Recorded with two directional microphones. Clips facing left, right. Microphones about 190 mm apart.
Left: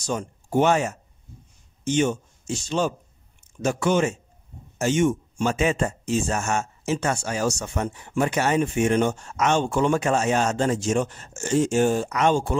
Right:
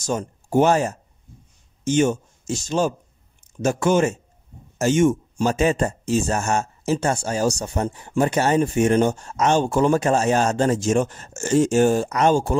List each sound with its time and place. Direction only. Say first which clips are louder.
0.0 s speech: right 3 dB; 45° right (ahead or behind)